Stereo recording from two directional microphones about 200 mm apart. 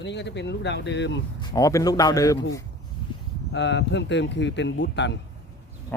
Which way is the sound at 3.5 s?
60° left (ahead or behind).